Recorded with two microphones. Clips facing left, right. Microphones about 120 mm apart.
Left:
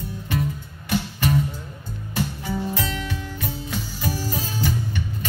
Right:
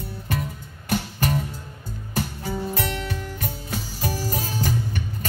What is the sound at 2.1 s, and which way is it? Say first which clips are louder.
Music: left 1 dB; 45° right (ahead or behind).